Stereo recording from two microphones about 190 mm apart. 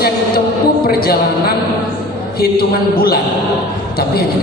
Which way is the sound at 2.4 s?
55° left (ahead or behind).